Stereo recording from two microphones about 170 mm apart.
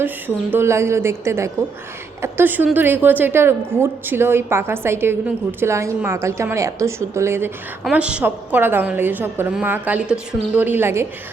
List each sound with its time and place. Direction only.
0.5 s a woman's voice: 15° right (ahead or behind)